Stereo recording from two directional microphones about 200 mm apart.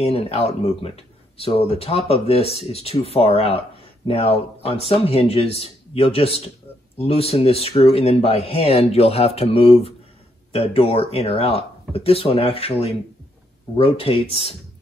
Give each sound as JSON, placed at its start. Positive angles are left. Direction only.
{"t": 0.0, "sound": "speech", "side_deg": 30}